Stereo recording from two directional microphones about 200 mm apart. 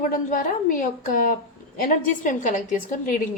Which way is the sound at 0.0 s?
40° left (ahead or behind).